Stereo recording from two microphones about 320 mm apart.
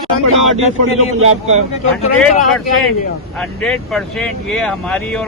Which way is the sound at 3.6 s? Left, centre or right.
Centre.